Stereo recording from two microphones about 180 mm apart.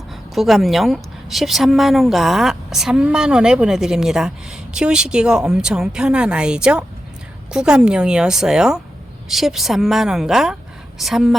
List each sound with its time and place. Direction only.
0.3 s a woman's voice: centre (ahead or behind)